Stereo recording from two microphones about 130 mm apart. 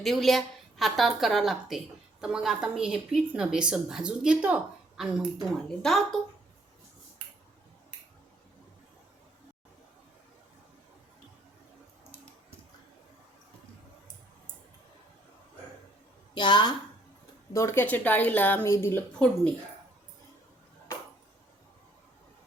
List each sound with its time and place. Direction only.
0.0 s a woman's voice: centre (ahead or behind)
16.3 s a woman's voice: 35° left (ahead or behind)
17.5 s speech: 20° left (ahead or behind)